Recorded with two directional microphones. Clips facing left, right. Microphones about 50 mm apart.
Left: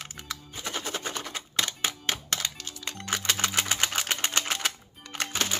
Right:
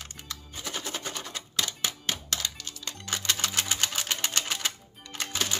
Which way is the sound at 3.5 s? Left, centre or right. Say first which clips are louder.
Left 2 dB; left.